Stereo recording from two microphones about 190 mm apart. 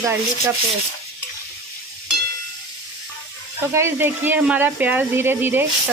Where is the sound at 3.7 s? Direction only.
10° right (ahead or behind).